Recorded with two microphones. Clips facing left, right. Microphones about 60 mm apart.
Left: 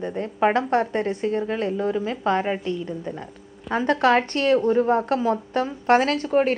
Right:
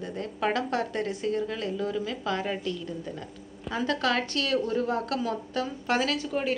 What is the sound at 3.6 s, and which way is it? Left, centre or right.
A woman's voice, left.